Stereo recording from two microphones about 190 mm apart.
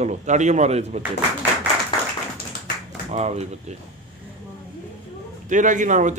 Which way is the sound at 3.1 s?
35° right (ahead or behind).